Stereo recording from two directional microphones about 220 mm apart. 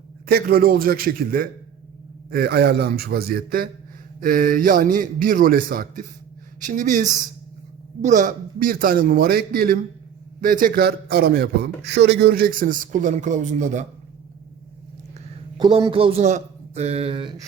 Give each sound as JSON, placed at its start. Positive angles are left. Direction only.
{"t": 0.3, "sound": "a man's voice", "side_deg": -45}
{"t": 15.5, "sound": "a man's voice", "side_deg": -20}